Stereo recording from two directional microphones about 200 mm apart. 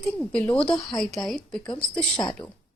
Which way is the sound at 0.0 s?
5° left (ahead or behind).